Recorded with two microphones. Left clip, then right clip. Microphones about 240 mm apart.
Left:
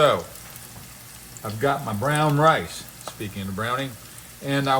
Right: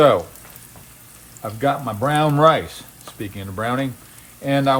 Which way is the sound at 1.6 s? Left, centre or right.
Right.